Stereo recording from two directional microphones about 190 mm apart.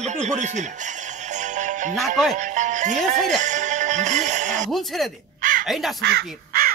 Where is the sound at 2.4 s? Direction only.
40° right (ahead or behind).